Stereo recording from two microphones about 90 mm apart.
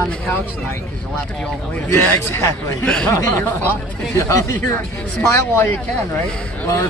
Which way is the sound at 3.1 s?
35° left (ahead or behind).